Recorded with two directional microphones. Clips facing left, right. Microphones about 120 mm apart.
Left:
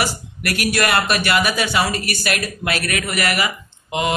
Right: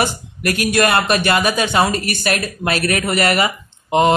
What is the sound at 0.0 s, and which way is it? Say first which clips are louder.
Speech: right 4 dB; 25° right (ahead or behind).